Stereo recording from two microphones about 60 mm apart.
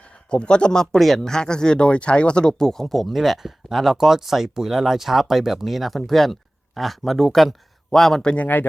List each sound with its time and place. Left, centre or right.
0.3 s speech: centre